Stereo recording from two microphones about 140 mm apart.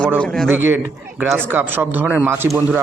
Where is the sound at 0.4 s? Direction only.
15° right (ahead or behind).